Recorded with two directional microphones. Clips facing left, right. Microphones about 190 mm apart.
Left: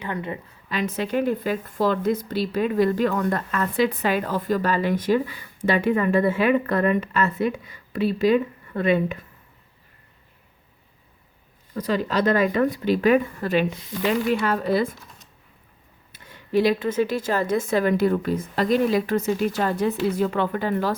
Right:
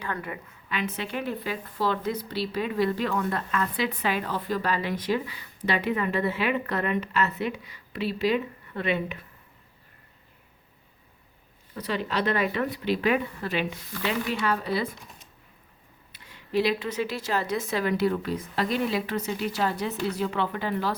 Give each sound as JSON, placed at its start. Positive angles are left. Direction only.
{"t": 0.0, "sound": "a woman's voice", "side_deg": 20}
{"t": 0.7, "sound": "a woman's voice", "side_deg": 40}
{"t": 11.7, "sound": "a woman's voice", "side_deg": 45}
{"t": 16.1, "sound": "a woman's voice", "side_deg": 50}